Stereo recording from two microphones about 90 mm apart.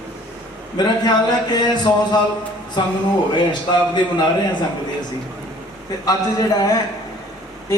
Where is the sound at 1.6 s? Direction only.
55° left (ahead or behind).